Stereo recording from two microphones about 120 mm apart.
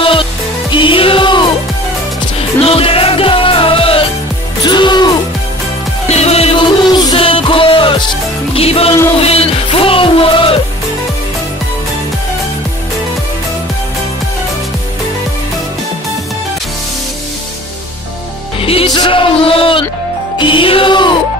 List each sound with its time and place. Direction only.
0.0 s music: 45° left (ahead or behind)
2.6 s music: 50° left (ahead or behind)
4.6 s music: 40° left (ahead or behind)
6.0 s music: 60° left (ahead or behind)
6.8 s music: 35° left (ahead or behind)
7.2 s music: 45° left (ahead or behind)
18.6 s music: 50° left (ahead or behind)
18.9 s a sound: 45° left (ahead or behind)
20.3 s music: 45° left (ahead or behind)